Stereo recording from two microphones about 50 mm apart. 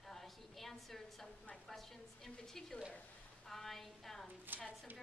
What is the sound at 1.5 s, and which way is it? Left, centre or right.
A woman's voice, centre.